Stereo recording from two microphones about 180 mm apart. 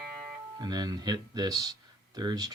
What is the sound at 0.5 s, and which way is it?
Speech, 20° right (ahead or behind).